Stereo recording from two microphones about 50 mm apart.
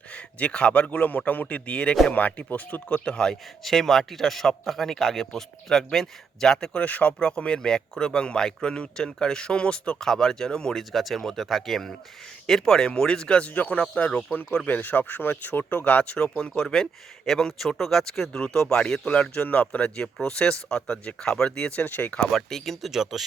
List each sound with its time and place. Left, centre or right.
0.1 s a man's voice: left
2.2 s speech: left
3.0 s speech: centre
3.6 s speech: centre
6.8 s speech: left
10.0 s speech: centre
10.9 s speech: centre
13.5 s speech: left
20.1 s speech: centre; by 22.1 s left
22.3 s speech: centre
22.9 s speech: centre